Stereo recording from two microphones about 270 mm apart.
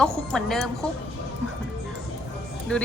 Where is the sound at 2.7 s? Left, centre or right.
Centre.